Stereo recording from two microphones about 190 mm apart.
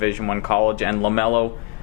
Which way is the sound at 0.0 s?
15° left (ahead or behind).